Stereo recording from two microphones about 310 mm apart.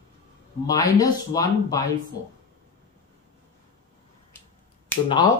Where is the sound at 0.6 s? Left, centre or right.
Centre.